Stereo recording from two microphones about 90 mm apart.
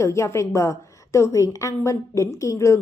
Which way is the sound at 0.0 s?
30° left (ahead or behind).